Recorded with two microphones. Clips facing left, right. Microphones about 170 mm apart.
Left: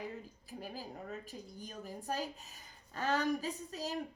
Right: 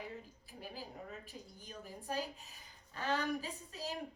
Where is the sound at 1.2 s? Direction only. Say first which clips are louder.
Left 5 dB; 40° left (ahead or behind).